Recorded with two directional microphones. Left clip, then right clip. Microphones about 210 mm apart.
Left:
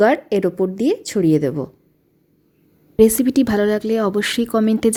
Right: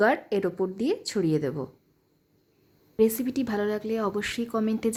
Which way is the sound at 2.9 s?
25° left (ahead or behind).